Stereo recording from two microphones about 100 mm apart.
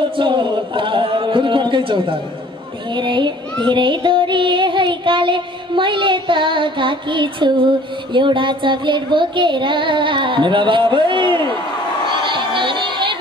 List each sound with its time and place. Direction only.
0.2 s a sound: 55° right (ahead or behind)
2.9 s a child's voice: 50° right (ahead or behind)
3.6 s child singing: 55° right (ahead or behind)
12.3 s music: 55° right (ahead or behind)